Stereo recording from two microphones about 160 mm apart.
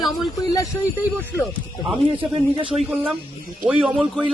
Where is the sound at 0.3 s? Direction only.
20° left (ahead or behind).